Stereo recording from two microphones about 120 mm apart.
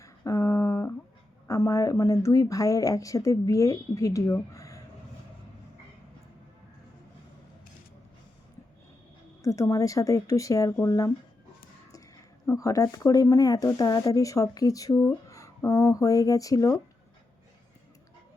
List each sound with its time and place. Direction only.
0.0 s a sound: 25° left (ahead or behind)
1.5 s speech: 25° left (ahead or behind)
9.4 s speech: 25° left (ahead or behind)
12.5 s speech: 30° left (ahead or behind)